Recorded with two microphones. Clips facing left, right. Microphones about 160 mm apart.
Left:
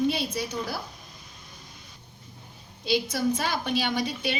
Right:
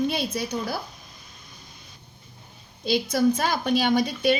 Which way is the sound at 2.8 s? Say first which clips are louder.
Right 4 dB; 45° right (ahead or behind).